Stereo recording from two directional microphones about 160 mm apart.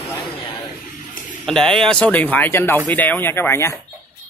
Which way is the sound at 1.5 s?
5° left (ahead or behind).